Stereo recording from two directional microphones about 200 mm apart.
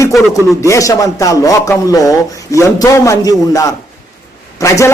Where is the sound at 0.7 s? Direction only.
15° left (ahead or behind).